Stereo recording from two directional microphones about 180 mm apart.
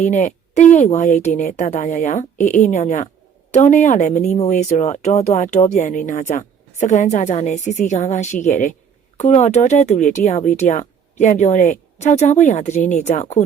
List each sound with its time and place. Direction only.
0.0 s speech: 45° left (ahead or behind)